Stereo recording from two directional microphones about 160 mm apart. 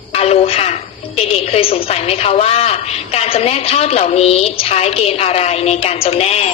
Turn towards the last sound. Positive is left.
turn(degrees=40)  # may be behind; listen again after turning